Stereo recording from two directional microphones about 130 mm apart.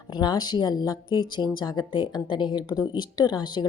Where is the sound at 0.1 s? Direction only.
30° left (ahead or behind).